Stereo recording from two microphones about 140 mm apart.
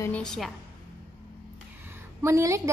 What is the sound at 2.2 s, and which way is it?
Speech, 20° right (ahead or behind).